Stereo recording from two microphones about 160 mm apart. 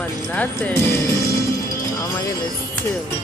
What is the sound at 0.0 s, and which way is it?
Speech, 10° left (ahead or behind).